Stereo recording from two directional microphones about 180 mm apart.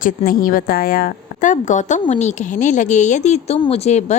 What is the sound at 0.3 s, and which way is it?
A woman's voice, 50° left (ahead or behind).